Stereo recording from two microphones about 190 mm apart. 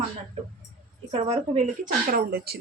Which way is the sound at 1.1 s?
35° right (ahead or behind).